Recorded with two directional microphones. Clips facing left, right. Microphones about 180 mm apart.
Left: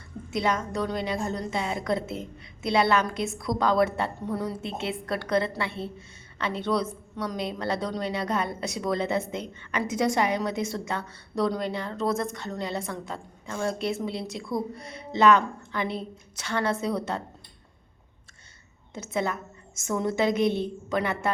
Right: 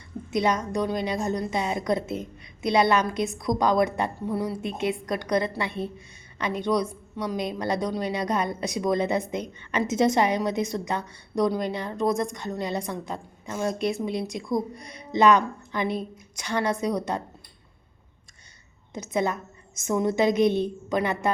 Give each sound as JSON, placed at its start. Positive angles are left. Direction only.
{"t": 0.3, "sound": "a woman's voice", "side_deg": -20}
{"t": 18.9, "sound": "a woman's voice", "side_deg": -15}